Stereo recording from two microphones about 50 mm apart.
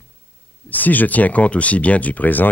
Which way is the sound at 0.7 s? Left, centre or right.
Left.